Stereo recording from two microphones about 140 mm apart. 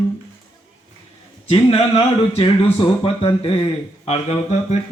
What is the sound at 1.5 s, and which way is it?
Speech, 35° left (ahead or behind).